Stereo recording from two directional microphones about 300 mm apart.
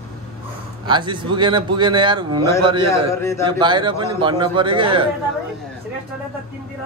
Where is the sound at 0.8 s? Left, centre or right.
Centre.